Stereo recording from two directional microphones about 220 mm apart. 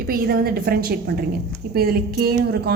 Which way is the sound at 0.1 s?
45° right (ahead or behind).